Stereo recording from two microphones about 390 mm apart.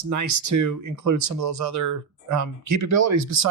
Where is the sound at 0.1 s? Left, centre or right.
Right.